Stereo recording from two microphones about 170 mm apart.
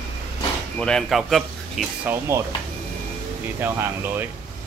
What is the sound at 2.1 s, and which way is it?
Speech, 15° right (ahead or behind).